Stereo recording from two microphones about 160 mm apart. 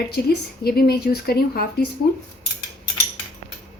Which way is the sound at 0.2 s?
90° left.